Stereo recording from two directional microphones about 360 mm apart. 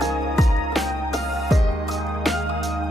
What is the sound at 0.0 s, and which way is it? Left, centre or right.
Music, centre.